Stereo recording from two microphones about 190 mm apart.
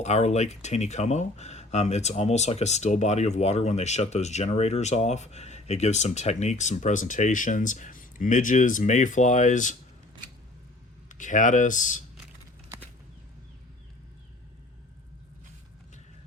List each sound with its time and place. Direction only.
0.0 s speech: 35° left (ahead or behind)
11.1 s speech: 40° left (ahead or behind)